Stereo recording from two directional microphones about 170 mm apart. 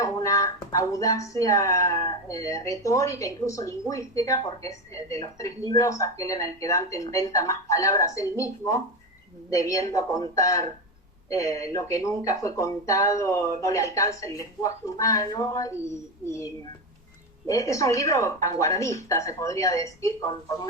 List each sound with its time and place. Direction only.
0.0 s speech: 20° left (ahead or behind)